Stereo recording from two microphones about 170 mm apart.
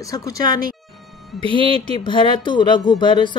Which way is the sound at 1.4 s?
30° right (ahead or behind).